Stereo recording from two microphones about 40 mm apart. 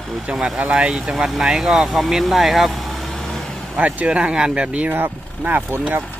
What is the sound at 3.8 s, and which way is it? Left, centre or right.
Speech, right.